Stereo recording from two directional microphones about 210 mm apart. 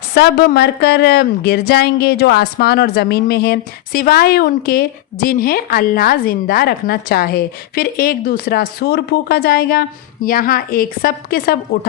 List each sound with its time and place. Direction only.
0.1 s speech: 50° left (ahead or behind)